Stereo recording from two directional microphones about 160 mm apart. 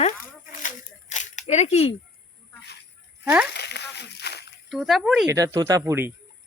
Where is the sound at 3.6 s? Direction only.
90° left.